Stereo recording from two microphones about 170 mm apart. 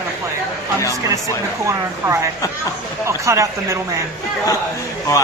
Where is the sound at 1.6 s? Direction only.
15° right (ahead or behind).